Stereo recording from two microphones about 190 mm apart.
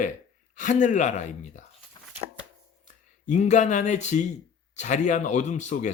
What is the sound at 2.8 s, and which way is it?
A man's voice, 40° left (ahead or behind).